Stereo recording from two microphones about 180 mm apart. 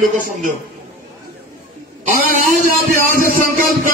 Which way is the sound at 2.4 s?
50° right (ahead or behind).